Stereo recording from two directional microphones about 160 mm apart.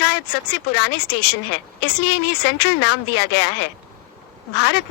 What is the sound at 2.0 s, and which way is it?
A woman's voice, 90° left.